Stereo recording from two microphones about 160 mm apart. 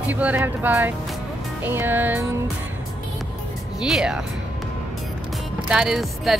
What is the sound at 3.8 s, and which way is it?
Speech, 5° right (ahead or behind).